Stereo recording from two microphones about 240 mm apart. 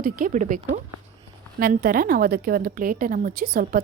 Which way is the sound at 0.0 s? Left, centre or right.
Right.